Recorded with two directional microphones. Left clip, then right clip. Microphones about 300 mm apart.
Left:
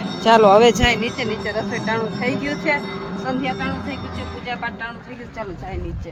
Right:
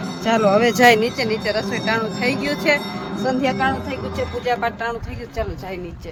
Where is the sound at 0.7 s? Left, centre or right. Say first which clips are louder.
Right 6 dB; right.